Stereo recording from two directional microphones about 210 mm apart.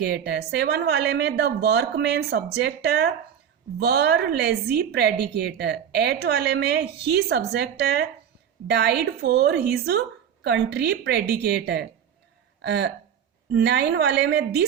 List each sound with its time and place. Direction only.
0.0 s a woman's voice: 50° right (ahead or behind)